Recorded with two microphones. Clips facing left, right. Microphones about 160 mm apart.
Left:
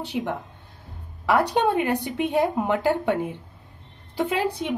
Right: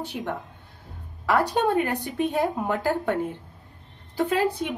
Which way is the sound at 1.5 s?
20° left (ahead or behind).